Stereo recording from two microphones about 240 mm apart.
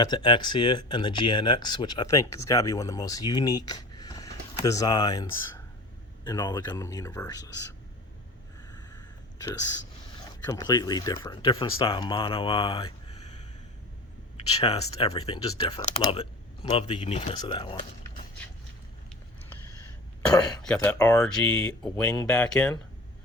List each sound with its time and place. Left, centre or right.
0.0 s speech: centre
8.7 s a sound: centre
10.4 s speech: centre
14.3 s speech: left
20.6 s speech: centre